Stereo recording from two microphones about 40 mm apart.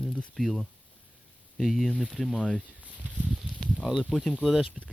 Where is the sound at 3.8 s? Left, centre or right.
Centre.